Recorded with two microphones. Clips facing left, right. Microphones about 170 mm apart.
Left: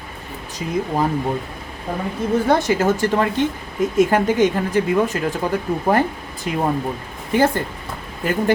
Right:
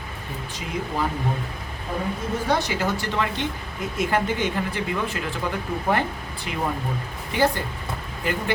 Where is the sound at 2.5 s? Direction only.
45° left (ahead or behind).